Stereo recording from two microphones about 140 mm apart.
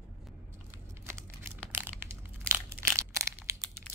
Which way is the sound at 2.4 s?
15° right (ahead or behind).